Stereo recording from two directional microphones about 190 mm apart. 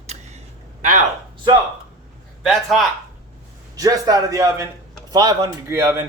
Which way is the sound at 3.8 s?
20° right (ahead or behind).